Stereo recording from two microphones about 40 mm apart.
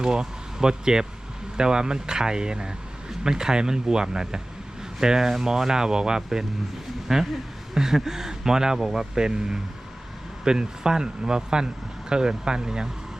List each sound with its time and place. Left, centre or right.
0.0 s speech: centre